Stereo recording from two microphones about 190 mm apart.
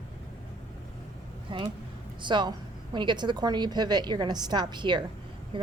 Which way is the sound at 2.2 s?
25° right (ahead or behind).